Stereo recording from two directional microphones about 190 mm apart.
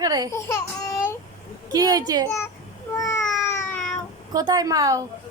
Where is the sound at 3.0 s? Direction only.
15° left (ahead or behind).